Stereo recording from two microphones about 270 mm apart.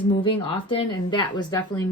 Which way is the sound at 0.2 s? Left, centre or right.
Centre.